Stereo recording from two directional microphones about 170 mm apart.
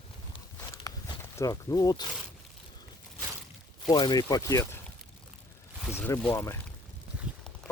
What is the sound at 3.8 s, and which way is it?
Speech, 25° left (ahead or behind).